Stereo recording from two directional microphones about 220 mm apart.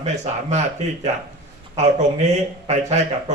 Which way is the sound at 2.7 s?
30° right (ahead or behind).